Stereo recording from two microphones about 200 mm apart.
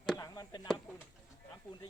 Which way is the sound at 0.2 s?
20° left (ahead or behind).